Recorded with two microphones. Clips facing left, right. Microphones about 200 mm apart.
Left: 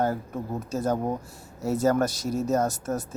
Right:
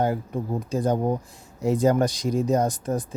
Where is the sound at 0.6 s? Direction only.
15° right (ahead or behind).